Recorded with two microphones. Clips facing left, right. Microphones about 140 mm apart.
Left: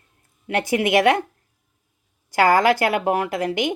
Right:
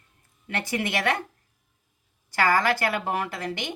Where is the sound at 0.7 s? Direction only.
50° left (ahead or behind).